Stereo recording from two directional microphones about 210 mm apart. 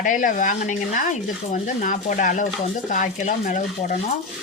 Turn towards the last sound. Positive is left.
turn(degrees=35)  # may be behind; listen again after turning